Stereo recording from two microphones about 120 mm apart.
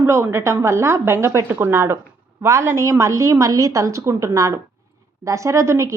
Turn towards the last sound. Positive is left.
turn(degrees=-25)  # may be behind; listen again after turning